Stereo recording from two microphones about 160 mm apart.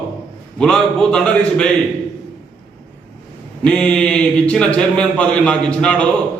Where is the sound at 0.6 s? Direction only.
5° left (ahead or behind).